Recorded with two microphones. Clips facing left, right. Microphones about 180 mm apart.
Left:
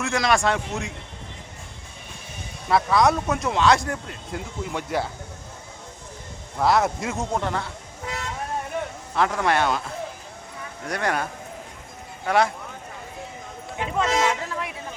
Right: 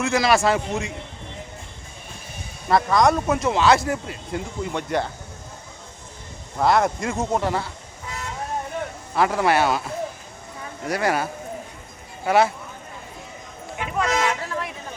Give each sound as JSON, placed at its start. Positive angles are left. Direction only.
{"t": 0.0, "sound": "speech", "side_deg": 0}
{"t": 2.6, "sound": "speech", "side_deg": 0}
{"t": 6.6, "sound": "speech", "side_deg": 0}
{"t": 9.1, "sound": "speech", "side_deg": -5}
{"t": 10.8, "sound": "speech", "side_deg": -5}
{"t": 13.7, "sound": "speech", "side_deg": 25}